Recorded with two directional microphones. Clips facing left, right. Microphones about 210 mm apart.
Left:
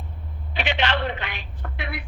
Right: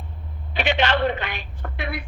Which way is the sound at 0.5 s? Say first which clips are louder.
Right 3 dB; 45° right (ahead or behind).